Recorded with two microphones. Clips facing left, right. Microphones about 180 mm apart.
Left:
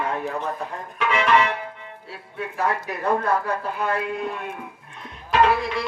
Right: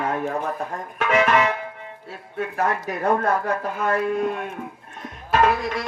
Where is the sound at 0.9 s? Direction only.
45° right (ahead or behind).